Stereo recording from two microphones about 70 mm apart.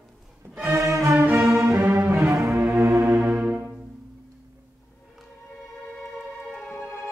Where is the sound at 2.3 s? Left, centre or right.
Right.